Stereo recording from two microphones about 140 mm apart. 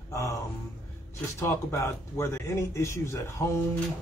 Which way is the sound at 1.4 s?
20° left (ahead or behind).